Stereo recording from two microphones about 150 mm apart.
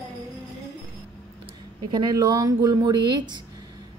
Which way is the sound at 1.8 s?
30° right (ahead or behind).